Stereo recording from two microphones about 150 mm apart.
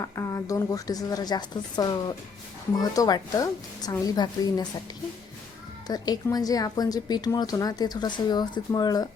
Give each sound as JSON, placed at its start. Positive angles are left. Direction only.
{"t": 0.0, "sound": "speech", "side_deg": 20}
{"t": 5.9, "sound": "speech", "side_deg": 25}